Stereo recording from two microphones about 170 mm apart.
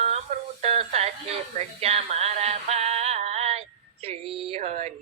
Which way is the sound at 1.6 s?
40° right (ahead or behind).